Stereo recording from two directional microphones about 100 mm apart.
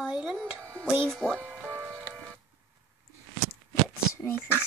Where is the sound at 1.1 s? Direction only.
5° left (ahead or behind).